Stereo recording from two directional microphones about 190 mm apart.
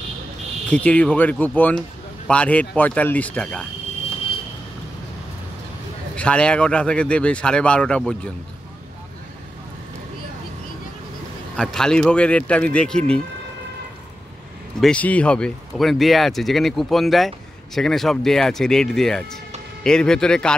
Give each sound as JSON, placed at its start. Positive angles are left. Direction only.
{"t": 0.7, "sound": "a man's voice", "side_deg": 5}
{"t": 6.1, "sound": "speech", "side_deg": 5}
{"t": 11.5, "sound": "speech", "side_deg": 5}
{"t": 14.8, "sound": "speech", "side_deg": 5}